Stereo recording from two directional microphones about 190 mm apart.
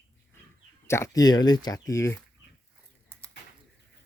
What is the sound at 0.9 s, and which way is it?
Speech, 15° left (ahead or behind).